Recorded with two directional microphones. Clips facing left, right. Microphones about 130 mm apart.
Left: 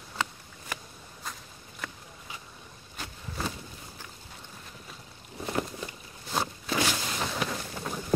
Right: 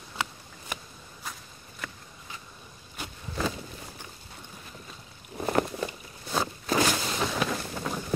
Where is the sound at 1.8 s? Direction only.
Centre (ahead or behind).